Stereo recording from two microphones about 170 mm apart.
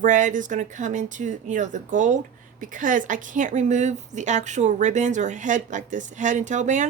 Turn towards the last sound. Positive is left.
turn(degrees=-45)  # may be behind; listen again after turning